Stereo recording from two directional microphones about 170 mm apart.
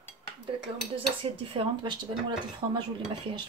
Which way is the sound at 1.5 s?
30° right (ahead or behind).